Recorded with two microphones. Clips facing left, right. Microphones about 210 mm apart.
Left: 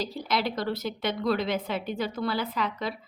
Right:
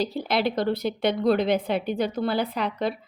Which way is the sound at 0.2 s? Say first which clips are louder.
Right 3 dB; 55° right (ahead or behind).